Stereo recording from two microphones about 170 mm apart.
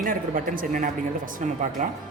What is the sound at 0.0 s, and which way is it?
Speech, 55° right (ahead or behind).